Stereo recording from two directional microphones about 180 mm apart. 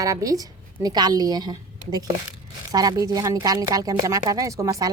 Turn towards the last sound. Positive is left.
turn(degrees=-15)  # may be behind; listen again after turning